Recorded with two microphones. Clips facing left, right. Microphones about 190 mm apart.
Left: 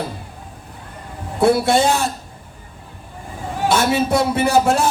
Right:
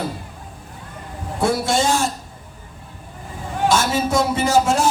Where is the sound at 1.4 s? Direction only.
60° left (ahead or behind).